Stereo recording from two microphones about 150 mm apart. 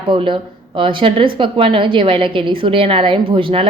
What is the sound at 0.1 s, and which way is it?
A woman's voice, 35° right (ahead or behind).